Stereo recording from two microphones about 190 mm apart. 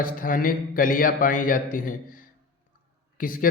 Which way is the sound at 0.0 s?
50° left (ahead or behind).